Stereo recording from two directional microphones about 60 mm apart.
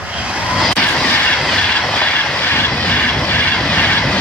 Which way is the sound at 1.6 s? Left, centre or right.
Centre.